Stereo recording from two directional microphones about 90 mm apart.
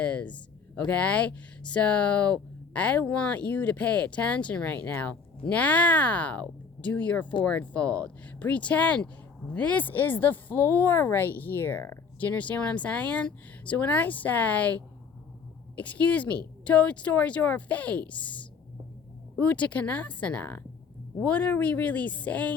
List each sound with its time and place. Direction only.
0.0 s speech: 15° left (ahead or behind)
12.2 s speech: 15° left (ahead or behind)